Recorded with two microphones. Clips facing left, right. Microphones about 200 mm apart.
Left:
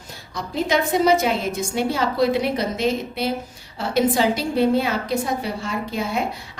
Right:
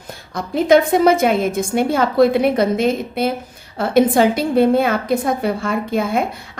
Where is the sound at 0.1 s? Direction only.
55° right (ahead or behind).